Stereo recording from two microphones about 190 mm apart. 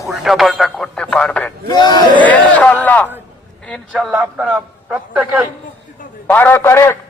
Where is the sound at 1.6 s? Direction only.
20° left (ahead or behind).